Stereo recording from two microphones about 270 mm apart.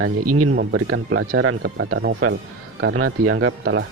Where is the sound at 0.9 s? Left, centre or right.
Right.